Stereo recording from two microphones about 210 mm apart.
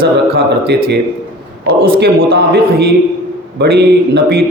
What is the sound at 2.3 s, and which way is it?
A man's voice, 45° right (ahead or behind).